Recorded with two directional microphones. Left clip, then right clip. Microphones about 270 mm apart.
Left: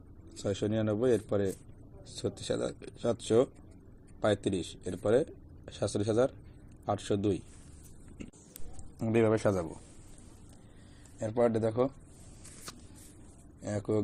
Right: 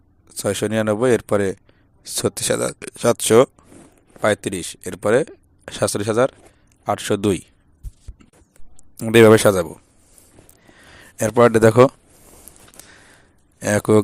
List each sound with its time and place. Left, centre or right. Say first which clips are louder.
0.3 s speech: right 12 dB; right
9.0 s speech: right 17 dB; right
11.2 s speech: right 16 dB; right
13.6 s speech: right 17 dB; right